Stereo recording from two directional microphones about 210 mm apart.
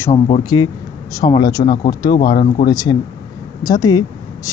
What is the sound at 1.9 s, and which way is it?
Speech, 20° left (ahead or behind).